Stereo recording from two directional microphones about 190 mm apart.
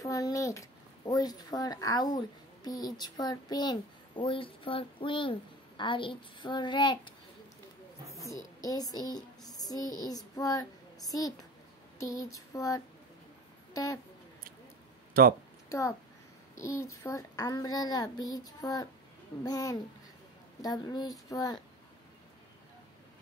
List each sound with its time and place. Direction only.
0.0 s speech: 15° left (ahead or behind)
8.5 s speech: 20° left (ahead or behind)
9.5 s child singing: 20° left (ahead or behind)
12.0 s female singing: 15° left (ahead or behind)
15.2 s speech: 50° right (ahead or behind)
16.5 s speech: 15° left (ahead or behind)